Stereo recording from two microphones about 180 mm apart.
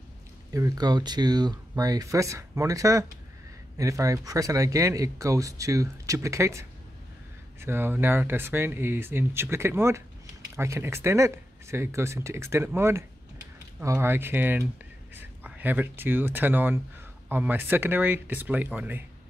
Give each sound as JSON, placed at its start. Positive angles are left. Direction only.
{"t": 0.5, "sound": "speech", "side_deg": -20}
{"t": 7.6, "sound": "speech", "side_deg": -10}